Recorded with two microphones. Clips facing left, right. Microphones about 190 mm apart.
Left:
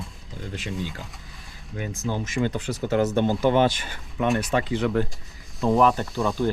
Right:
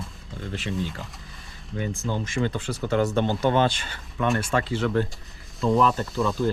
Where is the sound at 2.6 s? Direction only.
20° left (ahead or behind).